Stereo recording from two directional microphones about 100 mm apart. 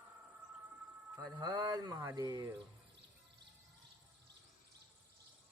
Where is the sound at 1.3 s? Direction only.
50° right (ahead or behind).